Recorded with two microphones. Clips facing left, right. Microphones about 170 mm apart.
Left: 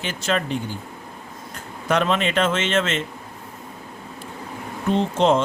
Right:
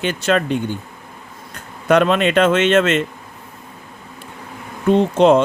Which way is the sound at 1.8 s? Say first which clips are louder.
Right 6 dB; 60° right (ahead or behind).